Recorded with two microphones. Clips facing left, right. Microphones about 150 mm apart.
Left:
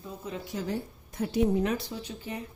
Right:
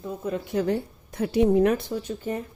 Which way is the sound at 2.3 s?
45° right (ahead or behind).